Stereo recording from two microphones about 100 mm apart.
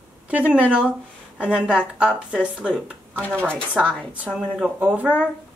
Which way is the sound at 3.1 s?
15° left (ahead or behind).